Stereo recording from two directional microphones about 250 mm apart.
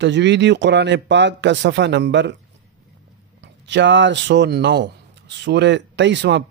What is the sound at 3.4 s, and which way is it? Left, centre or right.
Speech, right.